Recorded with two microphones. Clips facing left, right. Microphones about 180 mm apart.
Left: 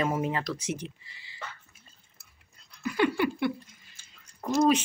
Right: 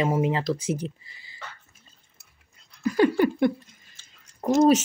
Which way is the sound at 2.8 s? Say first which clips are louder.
Right 6 dB; 40° right (ahead or behind).